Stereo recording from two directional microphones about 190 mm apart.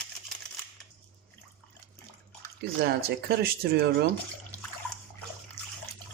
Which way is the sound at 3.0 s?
55° right (ahead or behind).